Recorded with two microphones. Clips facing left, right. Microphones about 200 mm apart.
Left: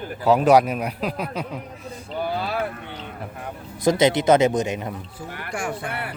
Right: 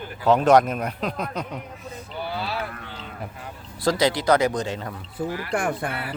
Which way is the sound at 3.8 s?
20° left (ahead or behind).